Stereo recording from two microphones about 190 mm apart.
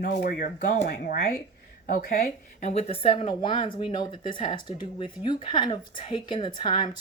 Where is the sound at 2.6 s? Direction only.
35° left (ahead or behind).